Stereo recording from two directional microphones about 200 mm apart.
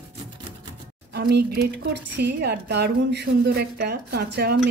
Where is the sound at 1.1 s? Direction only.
55° right (ahead or behind).